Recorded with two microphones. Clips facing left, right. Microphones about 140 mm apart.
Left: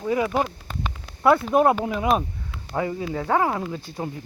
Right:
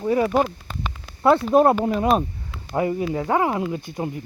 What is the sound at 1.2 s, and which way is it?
Speech, 30° right (ahead or behind).